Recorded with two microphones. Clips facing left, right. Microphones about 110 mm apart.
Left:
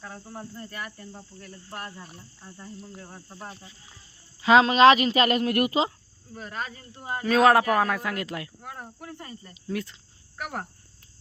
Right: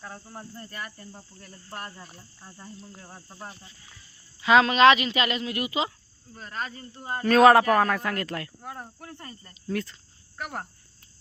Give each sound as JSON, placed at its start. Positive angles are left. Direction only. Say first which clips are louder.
{"t": 0.0, "sound": "cricket", "louder": "left 2 dB", "side_deg": 0}
{"t": 4.4, "sound": "speech", "louder": "left 1 dB", "side_deg": 30}
{"t": 6.3, "sound": "speech", "louder": "even", "side_deg": 10}
{"t": 8.6, "sound": "cricket", "louder": "even", "side_deg": 0}
{"t": 10.3, "sound": "speech", "louder": "left 1 dB", "side_deg": 5}